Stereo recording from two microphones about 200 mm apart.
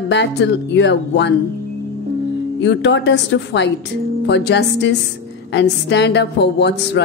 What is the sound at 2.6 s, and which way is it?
A woman's voice, 60° left (ahead or behind).